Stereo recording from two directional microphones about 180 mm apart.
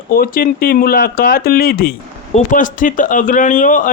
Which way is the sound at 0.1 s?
55° left (ahead or behind).